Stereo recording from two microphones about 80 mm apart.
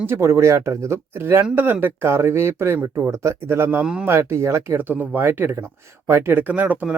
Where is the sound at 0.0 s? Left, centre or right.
Right.